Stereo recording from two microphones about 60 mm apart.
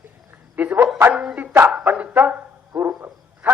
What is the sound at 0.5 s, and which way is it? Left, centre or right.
Speech, right.